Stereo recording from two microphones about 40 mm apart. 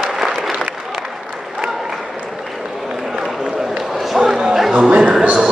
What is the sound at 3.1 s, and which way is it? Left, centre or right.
Run, centre.